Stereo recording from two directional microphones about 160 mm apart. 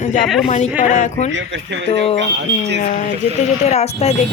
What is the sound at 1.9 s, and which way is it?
Speech, 40° left (ahead or behind).